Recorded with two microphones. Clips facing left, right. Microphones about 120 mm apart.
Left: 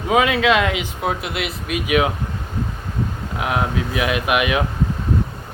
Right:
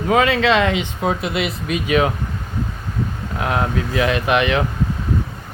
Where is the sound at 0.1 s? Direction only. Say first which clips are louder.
Even; 10° left (ahead or behind).